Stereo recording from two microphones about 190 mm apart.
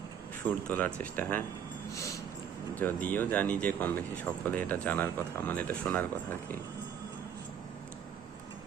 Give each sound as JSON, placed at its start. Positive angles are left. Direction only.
{"t": 0.4, "sound": "speech", "side_deg": 10}
{"t": 1.9, "sound": "a sound", "side_deg": 15}
{"t": 2.7, "sound": "speech", "side_deg": 10}